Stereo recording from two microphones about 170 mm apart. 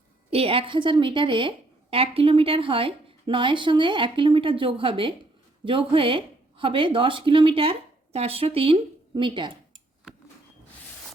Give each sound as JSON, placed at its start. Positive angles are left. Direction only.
{"t": 0.3, "sound": "a woman's voice", "side_deg": -35}